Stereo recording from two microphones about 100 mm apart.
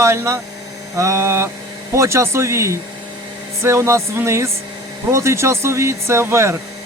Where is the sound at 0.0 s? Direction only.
25° right (ahead or behind).